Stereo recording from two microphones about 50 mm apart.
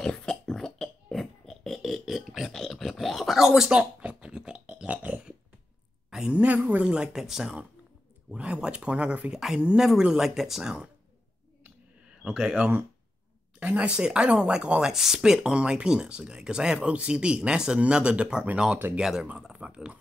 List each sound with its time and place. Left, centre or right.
0.0 s a sound: centre
3.3 s speech: centre
4.0 s pig: centre
6.0 s a sound: centre
6.3 s speech: right
6.9 s speech: centre
9.8 s speech: centre
12.2 s speech: centre
14.8 s speech: centre
18.9 s speech: centre
19.5 s a sound: right